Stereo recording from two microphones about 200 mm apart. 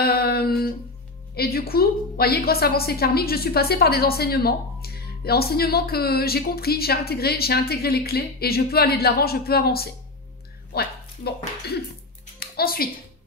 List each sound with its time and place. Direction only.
0.0 s a sound: 50° left (ahead or behind)
1.3 s a woman's voice: 50° left (ahead or behind)
10.7 s music: 55° left (ahead or behind)
12.4 s speech: 50° left (ahead or behind)